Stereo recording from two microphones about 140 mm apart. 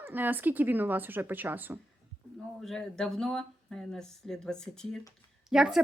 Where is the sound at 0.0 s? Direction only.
15° right (ahead or behind).